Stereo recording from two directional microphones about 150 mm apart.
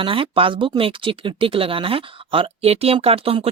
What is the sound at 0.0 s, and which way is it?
Speech, 35° right (ahead or behind).